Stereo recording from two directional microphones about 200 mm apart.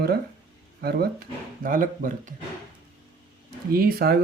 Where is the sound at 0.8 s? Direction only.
50° right (ahead or behind).